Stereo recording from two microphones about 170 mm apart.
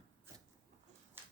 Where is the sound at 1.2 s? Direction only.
10° right (ahead or behind).